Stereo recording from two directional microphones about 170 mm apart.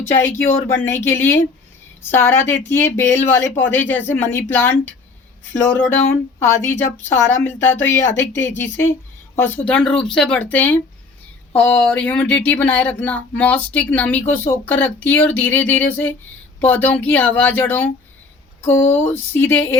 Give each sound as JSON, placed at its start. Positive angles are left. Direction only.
{"t": 0.1, "sound": "speech", "side_deg": 15}